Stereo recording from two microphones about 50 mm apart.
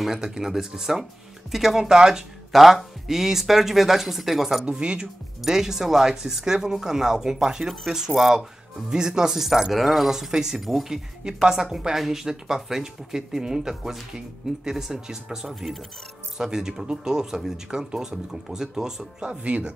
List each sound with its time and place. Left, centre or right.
0.0 s speech: centre
4.6 s speech: centre
5.4 s speech: centre
8.9 s speech: centre
19.1 s speech: right